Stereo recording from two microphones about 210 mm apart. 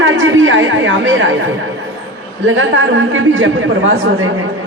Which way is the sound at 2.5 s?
65° right (ahead or behind).